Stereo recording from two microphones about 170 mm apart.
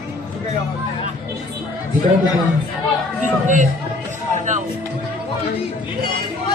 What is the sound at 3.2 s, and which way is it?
Speech, 45° right (ahead or behind).